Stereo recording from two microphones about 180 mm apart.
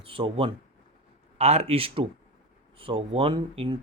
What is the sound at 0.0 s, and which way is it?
Speech, 30° right (ahead or behind).